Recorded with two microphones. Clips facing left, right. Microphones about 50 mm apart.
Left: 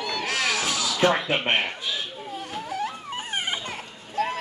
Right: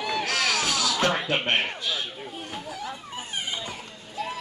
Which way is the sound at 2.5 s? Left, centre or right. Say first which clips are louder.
Left 8 dB; left.